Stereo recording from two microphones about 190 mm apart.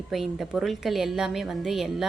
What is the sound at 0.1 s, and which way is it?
A woman's voice, centre (ahead or behind).